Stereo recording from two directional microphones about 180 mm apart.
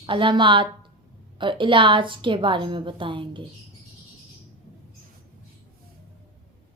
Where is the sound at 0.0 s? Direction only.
25° right (ahead or behind).